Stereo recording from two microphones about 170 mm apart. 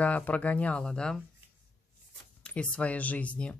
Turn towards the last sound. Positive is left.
turn(degrees=5)  # may be behind; listen again after turning